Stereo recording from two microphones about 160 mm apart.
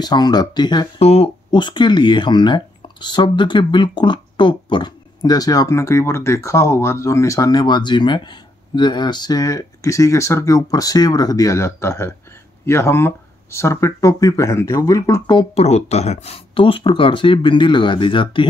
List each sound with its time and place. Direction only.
0.0 s speech: 25° left (ahead or behind)
0.9 s speech: 40° left (ahead or behind); by 15.3 s 20° left (ahead or behind)
15.3 s speech: 40° left (ahead or behind)